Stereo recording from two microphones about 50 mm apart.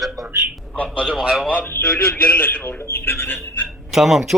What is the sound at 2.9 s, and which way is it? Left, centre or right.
Speech, left.